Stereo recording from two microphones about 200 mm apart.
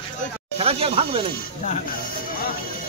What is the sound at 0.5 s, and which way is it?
Speech, 30° right (ahead or behind).